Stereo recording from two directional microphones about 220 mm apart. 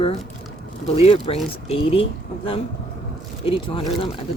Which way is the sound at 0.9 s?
25° left (ahead or behind).